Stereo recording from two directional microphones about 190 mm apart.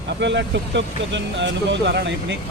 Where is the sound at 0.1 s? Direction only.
70° right (ahead or behind).